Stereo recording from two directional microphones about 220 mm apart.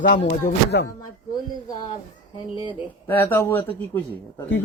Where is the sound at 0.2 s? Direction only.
45° left (ahead or behind).